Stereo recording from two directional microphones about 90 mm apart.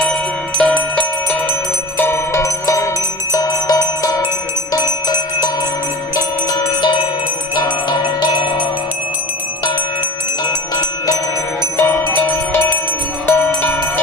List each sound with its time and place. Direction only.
0.0 s music: 10° left (ahead or behind)
2.0 s music: 25° left (ahead or behind); by 4.2 s 45° left (ahead or behind)
6.1 s music: 45° left (ahead or behind)
7.6 s bell: 50° left (ahead or behind)
8.2 s glockenspiel: 60° left (ahead or behind)
10.4 s music: 40° left (ahead or behind)
11.8 s music: 25° left (ahead or behind)